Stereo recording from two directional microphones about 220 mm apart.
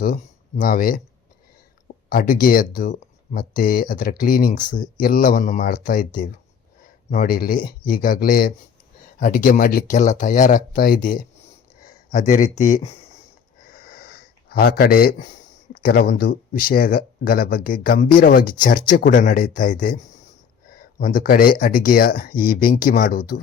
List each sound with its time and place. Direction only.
0.0 s speech: 35° left (ahead or behind)
2.0 s speech: 40° left (ahead or behind)
13.7 s a sound: 45° left (ahead or behind)
15.7 s speech: 45° left (ahead or behind)
20.7 s a sound: 40° left (ahead or behind)
21.6 s speech: 40° left (ahead or behind)